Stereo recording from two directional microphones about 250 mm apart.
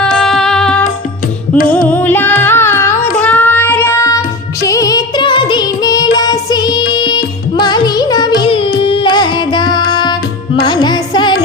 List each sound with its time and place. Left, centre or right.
0.0 s music: centre
1.9 s carnatic music: centre
3.2 s child singing: centre
4.6 s music: centre